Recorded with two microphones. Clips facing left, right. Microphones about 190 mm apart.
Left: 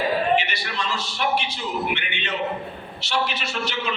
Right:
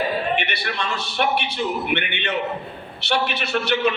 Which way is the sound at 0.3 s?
60° right (ahead or behind).